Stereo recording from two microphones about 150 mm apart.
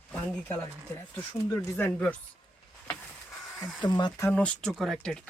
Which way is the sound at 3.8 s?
30° left (ahead or behind).